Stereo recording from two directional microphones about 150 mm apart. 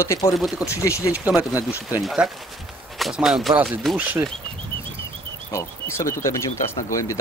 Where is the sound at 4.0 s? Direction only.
10° right (ahead or behind).